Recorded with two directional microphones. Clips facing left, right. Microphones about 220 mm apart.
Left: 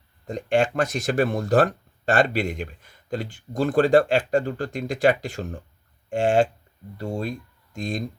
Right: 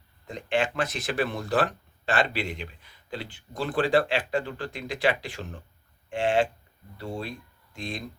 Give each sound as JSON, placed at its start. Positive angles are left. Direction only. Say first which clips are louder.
{"t": 0.3, "sound": "speech", "louder": "left 6 dB", "side_deg": 45}